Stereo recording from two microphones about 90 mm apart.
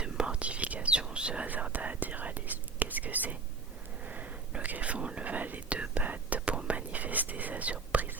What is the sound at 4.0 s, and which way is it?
Whispering, 20° right (ahead or behind).